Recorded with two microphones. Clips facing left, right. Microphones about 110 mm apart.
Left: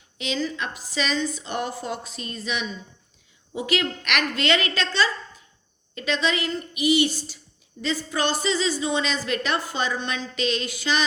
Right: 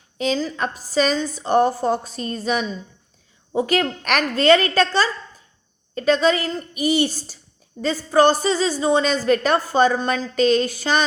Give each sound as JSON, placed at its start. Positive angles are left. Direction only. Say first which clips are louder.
{"t": 0.2, "sound": "a woman's voice", "louder": "right 6 dB", "side_deg": -40}